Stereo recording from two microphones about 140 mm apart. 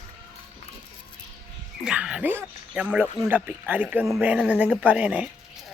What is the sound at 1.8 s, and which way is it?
Dog, 5° right (ahead or behind).